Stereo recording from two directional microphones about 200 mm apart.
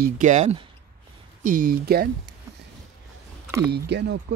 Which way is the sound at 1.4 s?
45° right (ahead or behind).